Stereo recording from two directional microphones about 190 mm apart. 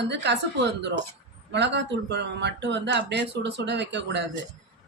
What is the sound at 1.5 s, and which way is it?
Speech, 65° right (ahead or behind).